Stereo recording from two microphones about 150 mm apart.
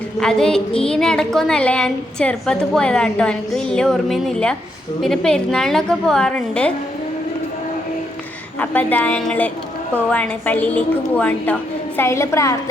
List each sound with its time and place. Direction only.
0.2 s a woman's voice: 5° left (ahead or behind)
8.5 s a woman's voice: 10° left (ahead or behind)